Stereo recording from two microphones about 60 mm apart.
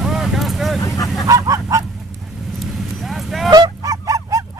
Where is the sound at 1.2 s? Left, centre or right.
Right.